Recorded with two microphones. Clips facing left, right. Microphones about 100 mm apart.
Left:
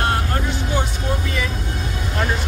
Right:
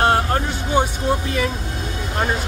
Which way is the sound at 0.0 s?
30° right (ahead or behind).